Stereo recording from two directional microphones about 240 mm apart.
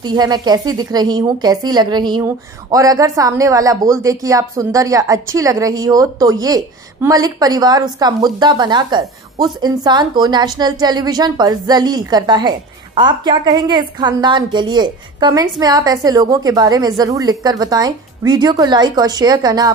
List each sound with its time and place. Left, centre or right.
0.0 s a woman's voice: centre